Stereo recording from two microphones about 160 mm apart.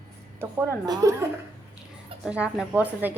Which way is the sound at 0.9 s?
20° right (ahead or behind).